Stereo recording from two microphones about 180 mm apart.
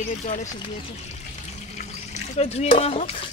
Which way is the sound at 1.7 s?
35° left (ahead or behind).